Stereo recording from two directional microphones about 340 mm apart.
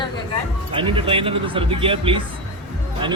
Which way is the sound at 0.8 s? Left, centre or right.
Centre.